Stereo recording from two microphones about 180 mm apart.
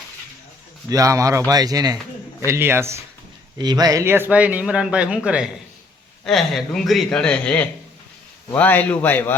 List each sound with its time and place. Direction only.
0.9 s a man's voice: 20° right (ahead or behind); by 9.3 s 10° left (ahead or behind)